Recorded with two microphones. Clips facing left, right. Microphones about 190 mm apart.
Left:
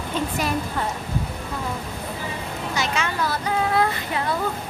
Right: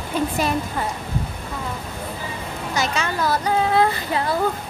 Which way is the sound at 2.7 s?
40° right (ahead or behind).